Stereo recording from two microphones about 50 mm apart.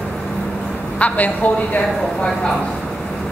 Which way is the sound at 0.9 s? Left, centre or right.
Left.